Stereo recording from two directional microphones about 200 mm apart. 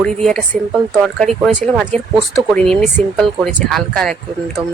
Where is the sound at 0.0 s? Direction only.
5° left (ahead or behind).